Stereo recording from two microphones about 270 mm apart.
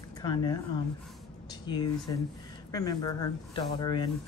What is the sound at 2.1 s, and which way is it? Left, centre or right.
A woman's voice, centre.